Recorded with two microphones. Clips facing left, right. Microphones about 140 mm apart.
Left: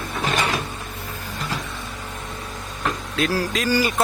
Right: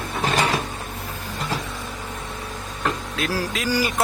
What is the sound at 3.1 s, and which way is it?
Speech, 5° right (ahead or behind).